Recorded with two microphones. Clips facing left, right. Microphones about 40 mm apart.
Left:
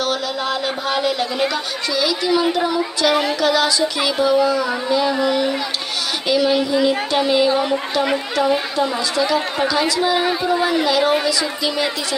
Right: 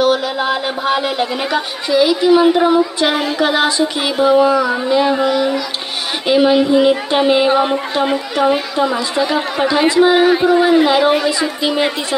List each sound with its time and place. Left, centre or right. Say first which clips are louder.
0.0 s speech: right 7 dB; right